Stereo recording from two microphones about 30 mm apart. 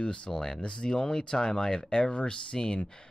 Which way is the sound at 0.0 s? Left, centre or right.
Left.